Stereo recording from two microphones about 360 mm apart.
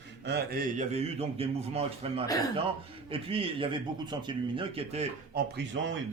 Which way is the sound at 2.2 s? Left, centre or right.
Centre.